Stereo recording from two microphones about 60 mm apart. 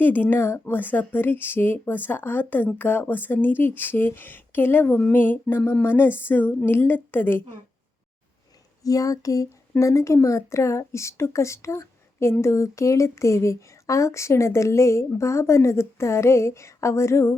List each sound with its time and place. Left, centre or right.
0.0 s speech: left
8.8 s speech: left